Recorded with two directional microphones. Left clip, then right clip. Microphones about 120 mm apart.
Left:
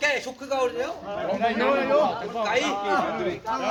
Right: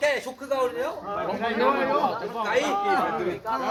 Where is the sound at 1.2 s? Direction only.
40° left (ahead or behind).